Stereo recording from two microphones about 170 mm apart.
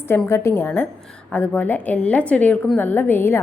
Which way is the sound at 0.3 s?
15° left (ahead or behind).